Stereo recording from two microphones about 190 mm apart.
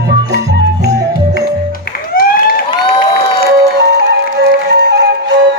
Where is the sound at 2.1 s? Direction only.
50° left (ahead or behind).